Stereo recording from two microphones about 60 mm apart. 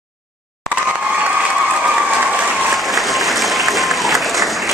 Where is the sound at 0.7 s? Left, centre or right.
Right.